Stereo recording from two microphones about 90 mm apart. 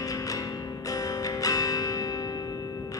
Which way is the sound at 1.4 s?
40° left (ahead or behind).